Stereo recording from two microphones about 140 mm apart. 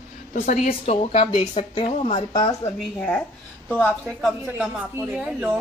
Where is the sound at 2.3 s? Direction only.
25° left (ahead or behind).